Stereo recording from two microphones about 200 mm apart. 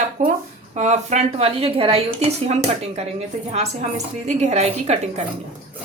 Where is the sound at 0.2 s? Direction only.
35° right (ahead or behind).